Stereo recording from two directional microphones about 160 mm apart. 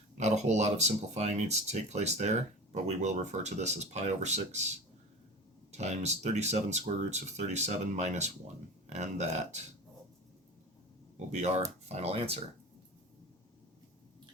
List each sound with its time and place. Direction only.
0.2 s speech: 45° right (ahead or behind)
11.3 s speech: 45° right (ahead or behind)